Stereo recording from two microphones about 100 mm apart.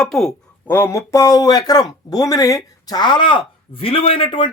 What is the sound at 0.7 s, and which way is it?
Speech, 25° left (ahead or behind).